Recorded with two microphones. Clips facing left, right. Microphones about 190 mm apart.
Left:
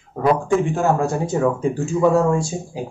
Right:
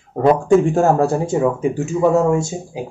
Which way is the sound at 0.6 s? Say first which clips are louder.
Right 4 dB; 40° right (ahead or behind).